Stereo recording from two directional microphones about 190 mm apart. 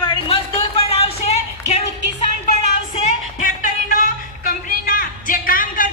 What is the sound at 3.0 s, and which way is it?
Music, 45° left (ahead or behind).